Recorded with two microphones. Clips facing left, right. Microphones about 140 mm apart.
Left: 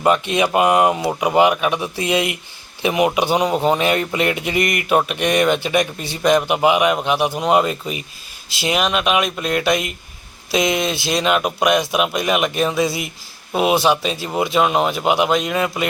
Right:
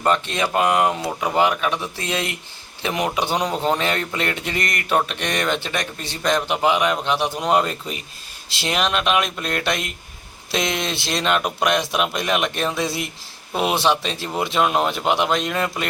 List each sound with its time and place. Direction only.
0.0 s speech: 10° left (ahead or behind)